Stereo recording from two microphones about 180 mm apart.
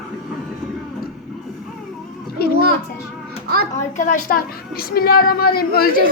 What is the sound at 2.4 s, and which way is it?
Children playing, 60° left (ahead or behind).